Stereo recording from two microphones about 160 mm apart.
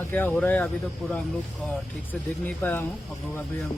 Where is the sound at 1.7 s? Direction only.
10° left (ahead or behind).